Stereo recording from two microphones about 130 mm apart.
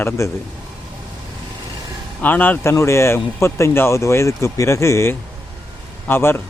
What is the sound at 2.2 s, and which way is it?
Speech, 15° left (ahead or behind).